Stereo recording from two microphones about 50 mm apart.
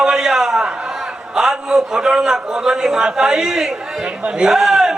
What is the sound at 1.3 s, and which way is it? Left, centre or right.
A man's voice, centre.